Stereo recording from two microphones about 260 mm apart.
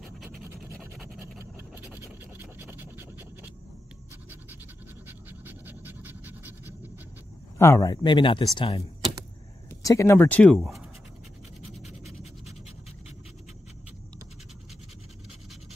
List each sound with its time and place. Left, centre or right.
0.7 s a sound: centre
1.9 s scratch: centre
5.0 s pant: centre
7.5 s speech: centre
9.7 s speech: centre
12.1 s scratch: centre